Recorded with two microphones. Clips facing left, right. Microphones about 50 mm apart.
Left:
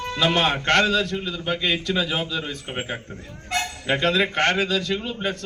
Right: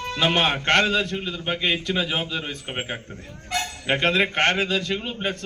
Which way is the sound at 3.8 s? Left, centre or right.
Right.